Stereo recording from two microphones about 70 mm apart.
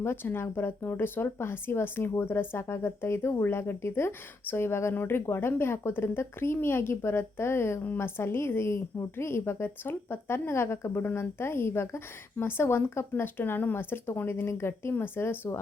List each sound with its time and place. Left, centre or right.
0.0 s speech: left